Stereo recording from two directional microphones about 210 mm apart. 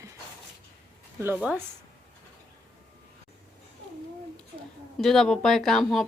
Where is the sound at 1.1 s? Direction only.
10° right (ahead or behind).